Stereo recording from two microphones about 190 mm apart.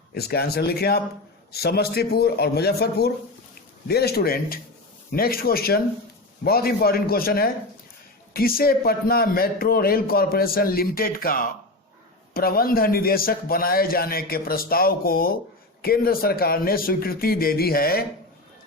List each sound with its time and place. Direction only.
0.1 s a man's voice: 55° left (ahead or behind)